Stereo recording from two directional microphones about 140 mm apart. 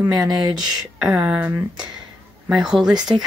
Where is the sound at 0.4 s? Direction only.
30° right (ahead or behind).